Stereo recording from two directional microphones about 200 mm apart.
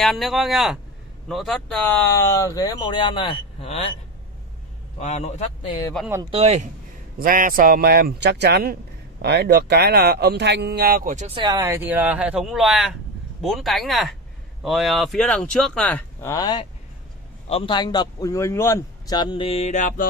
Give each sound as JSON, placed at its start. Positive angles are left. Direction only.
{"t": 0.0, "sound": "speech", "side_deg": 0}
{"t": 5.0, "sound": "a man's voice", "side_deg": 35}
{"t": 6.3, "sound": "speech", "side_deg": -35}
{"t": 7.2, "sound": "speech", "side_deg": -45}
{"t": 11.3, "sound": "a man's voice", "side_deg": -20}